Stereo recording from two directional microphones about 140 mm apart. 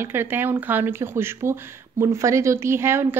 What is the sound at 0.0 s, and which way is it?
Speech, 15° right (ahead or behind).